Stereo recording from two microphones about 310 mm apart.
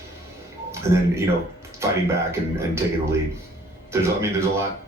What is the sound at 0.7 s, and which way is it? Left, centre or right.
Speech, centre.